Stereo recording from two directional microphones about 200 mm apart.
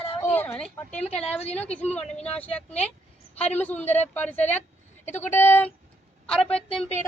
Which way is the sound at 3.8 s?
10° left (ahead or behind).